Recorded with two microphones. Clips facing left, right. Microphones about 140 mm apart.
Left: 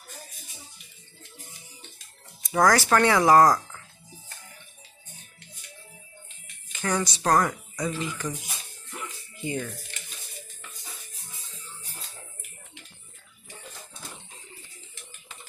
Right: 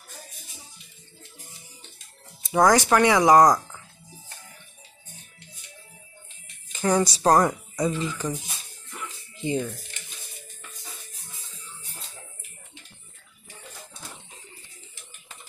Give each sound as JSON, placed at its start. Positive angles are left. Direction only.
{"t": 2.4, "sound": "speech", "side_deg": -20}
{"t": 6.7, "sound": "speech", "side_deg": -35}
{"t": 9.3, "sound": "music", "side_deg": -20}